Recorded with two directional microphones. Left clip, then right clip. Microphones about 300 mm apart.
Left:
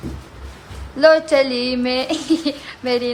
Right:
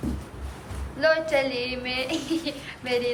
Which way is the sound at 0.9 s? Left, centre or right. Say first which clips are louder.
Left 9 dB; centre.